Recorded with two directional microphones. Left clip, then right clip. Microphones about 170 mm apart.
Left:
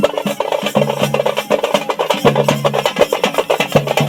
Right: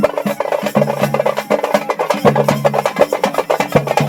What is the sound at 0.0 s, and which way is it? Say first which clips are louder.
Music: even; 5° left (ahead or behind).